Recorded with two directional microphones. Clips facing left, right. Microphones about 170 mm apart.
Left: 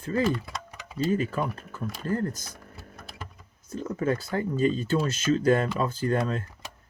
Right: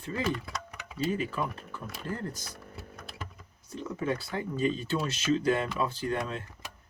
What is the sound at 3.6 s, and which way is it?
Speech, 45° left (ahead or behind).